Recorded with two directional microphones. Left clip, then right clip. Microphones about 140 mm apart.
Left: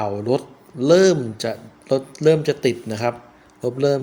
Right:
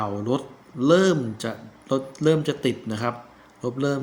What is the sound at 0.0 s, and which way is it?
A man's voice, 40° left (ahead or behind).